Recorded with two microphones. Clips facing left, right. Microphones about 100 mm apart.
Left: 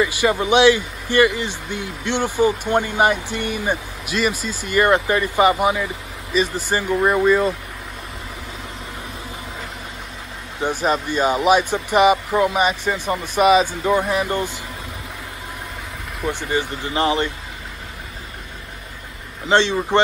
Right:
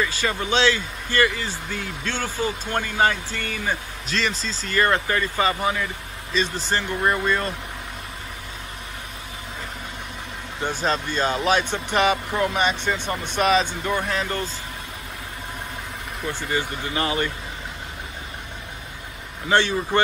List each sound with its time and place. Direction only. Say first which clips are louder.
0.0 s speech: left 6 dB; 15° left (ahead or behind)
10.6 s speech: left 4 dB; 10° left (ahead or behind)
16.3 s speech: left 4 dB; 20° left (ahead or behind)
19.5 s speech: left 4 dB; 25° left (ahead or behind)